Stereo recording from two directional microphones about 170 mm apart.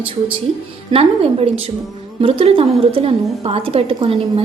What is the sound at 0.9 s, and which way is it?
A woman's voice, 35° right (ahead or behind).